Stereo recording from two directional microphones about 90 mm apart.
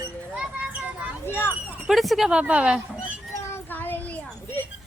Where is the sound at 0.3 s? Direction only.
15° right (ahead or behind).